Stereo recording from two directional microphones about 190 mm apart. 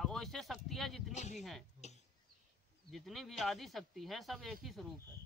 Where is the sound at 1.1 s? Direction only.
40° left (ahead or behind).